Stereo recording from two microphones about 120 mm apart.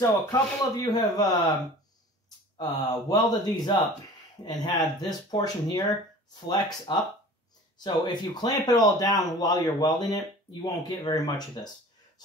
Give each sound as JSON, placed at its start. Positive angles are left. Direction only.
{"t": 0.0, "sound": "speech", "side_deg": 30}
{"t": 2.6, "sound": "speech", "side_deg": 35}